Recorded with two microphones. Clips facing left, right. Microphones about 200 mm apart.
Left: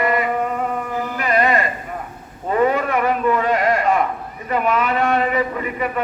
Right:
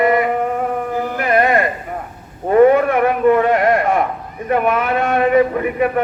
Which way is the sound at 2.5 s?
55° right (ahead or behind).